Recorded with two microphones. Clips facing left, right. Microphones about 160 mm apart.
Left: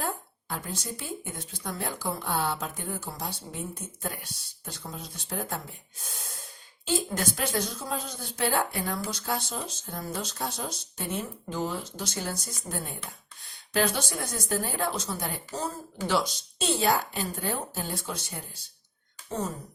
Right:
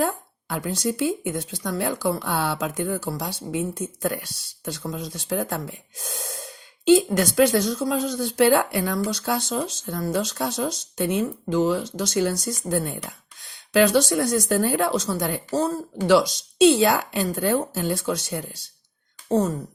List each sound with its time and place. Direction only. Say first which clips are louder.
0.0 s speech: right 9 dB; 85° right